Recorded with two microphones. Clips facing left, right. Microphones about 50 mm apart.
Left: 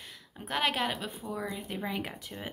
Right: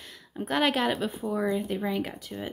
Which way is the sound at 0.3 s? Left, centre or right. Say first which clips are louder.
Right 5 dB; centre.